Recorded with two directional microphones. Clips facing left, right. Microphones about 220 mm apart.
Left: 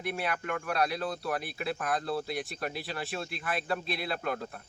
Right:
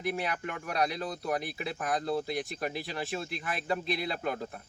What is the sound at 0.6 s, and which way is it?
Speech, 20° right (ahead or behind).